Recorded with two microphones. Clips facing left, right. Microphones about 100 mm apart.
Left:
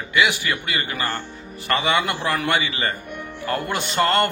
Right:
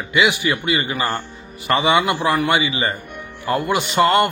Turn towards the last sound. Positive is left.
turn(degrees=-15)  # may be behind; listen again after turning